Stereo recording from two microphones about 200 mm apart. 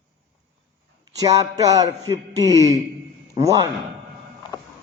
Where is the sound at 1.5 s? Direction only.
15° right (ahead or behind).